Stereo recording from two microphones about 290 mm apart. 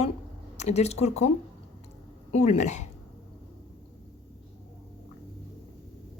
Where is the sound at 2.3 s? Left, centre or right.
Left.